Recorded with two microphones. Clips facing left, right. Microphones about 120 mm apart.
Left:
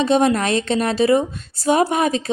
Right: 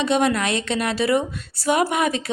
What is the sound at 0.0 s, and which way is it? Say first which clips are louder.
A woman's voice: left 3 dB; 35° left (ahead or behind).